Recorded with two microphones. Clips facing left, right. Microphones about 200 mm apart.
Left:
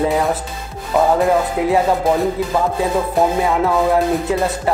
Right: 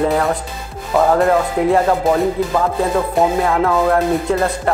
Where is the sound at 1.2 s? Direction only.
Centre (ahead or behind).